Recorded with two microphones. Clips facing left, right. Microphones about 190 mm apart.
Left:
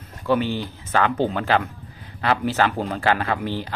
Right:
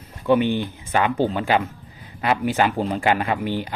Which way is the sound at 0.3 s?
15° right (ahead or behind).